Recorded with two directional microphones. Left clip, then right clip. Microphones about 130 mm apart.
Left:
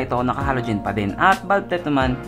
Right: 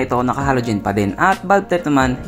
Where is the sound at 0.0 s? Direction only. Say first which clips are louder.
Right 4 dB; 20° right (ahead or behind).